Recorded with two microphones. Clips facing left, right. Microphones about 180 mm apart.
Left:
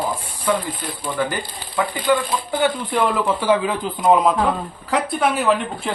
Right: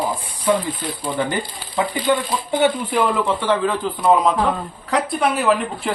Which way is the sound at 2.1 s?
20° right (ahead or behind).